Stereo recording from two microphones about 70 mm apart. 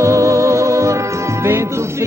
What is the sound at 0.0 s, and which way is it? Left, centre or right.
Music, right.